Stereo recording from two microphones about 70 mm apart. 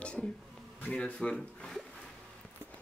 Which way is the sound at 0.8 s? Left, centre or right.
Centre.